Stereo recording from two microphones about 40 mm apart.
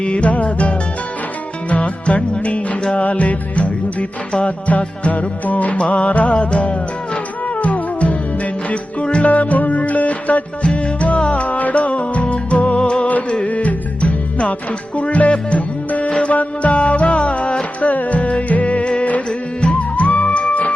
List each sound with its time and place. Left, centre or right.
0.0 s music: left
5.8 s music: left
6.1 s music: left